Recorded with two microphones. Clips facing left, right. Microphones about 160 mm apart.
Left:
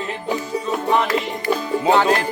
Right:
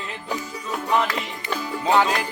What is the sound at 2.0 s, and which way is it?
Music, 50° left (ahead or behind).